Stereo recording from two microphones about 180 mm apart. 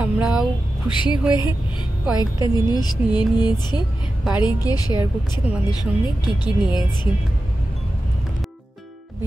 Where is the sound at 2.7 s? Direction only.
25° left (ahead or behind).